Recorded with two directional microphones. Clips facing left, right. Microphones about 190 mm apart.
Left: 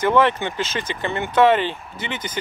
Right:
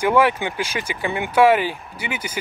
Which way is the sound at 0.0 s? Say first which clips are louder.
Even; 10° right (ahead or behind).